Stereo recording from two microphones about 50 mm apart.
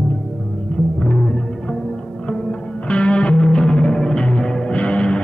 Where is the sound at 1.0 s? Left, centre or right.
Left.